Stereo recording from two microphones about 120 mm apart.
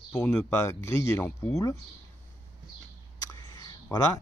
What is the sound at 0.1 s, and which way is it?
Speech, 10° left (ahead or behind).